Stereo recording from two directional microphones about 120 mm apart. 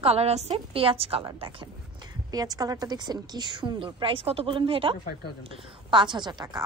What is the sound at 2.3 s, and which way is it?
A woman's voice, 30° right (ahead or behind).